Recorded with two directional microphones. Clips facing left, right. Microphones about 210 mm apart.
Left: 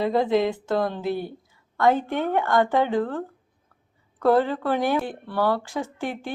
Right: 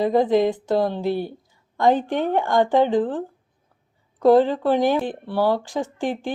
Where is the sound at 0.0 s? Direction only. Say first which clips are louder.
Right 3 dB; 15° right (ahead or behind).